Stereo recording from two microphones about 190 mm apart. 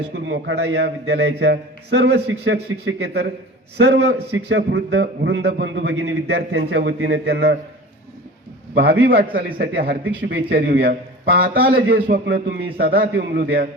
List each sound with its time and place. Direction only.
0.3 s a man's voice: 75° right (ahead or behind)
8.7 s a man's voice: 55° right (ahead or behind)
12.7 s a man's voice: 50° right (ahead or behind)